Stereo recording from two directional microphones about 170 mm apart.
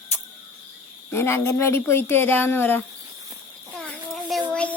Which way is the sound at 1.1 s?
15° left (ahead or behind).